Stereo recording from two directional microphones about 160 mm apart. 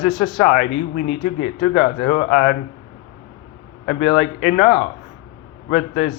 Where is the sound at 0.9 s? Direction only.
45° left (ahead or behind).